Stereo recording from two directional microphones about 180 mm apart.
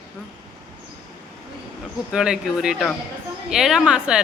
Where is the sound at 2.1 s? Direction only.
5° right (ahead or behind).